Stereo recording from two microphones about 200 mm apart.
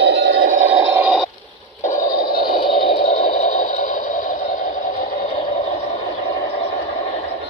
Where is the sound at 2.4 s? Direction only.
25° left (ahead or behind).